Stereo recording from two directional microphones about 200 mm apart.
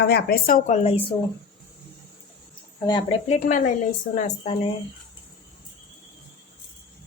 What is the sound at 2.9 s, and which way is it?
A woman's voice, 25° left (ahead or behind).